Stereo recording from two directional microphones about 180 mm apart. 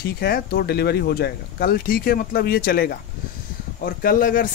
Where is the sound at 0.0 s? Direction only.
55° left (ahead or behind).